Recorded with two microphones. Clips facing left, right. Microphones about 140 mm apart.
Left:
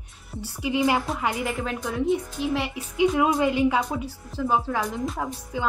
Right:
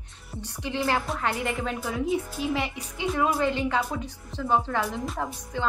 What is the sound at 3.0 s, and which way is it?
A woman's voice, 15° left (ahead or behind).